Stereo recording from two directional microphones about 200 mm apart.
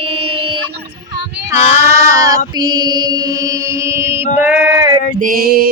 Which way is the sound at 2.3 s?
20° right (ahead or behind).